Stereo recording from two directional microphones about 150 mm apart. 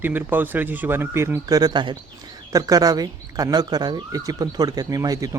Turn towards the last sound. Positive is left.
turn(degrees=-25)  # may be behind; listen again after turning